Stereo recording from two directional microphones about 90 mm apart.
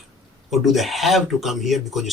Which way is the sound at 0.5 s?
Centre (ahead or behind).